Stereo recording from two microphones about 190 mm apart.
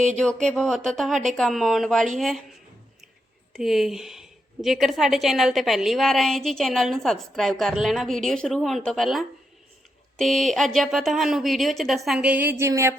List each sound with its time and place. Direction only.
0.0 s a woman's voice: 5° left (ahead or behind)
3.6 s a woman's voice: centre (ahead or behind)